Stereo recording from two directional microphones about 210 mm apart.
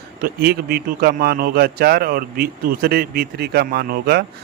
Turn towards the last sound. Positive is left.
turn(degrees=-50)  # may be behind; listen again after turning